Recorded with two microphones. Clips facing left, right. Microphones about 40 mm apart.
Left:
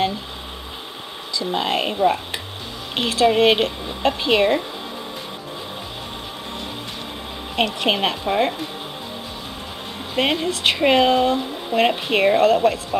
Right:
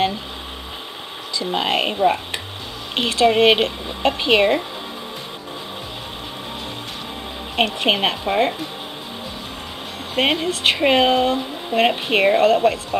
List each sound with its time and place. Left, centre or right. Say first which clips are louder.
1.5 s a woman's voice: right 2 dB; centre
7.5 s speech: right 1 dB; centre
10.1 s speech: right 1 dB; centre